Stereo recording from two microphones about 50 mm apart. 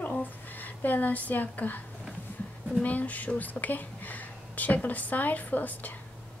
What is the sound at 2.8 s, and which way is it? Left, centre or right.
A woman's voice, left.